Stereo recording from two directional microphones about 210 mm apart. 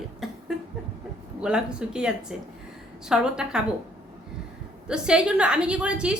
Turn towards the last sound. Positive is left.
turn(degrees=-5)  # may be behind; listen again after turning